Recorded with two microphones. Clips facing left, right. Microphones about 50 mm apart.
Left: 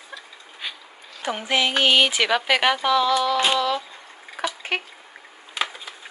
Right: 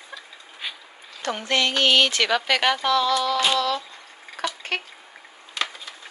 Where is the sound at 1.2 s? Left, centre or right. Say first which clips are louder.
Left 1 dB; centre.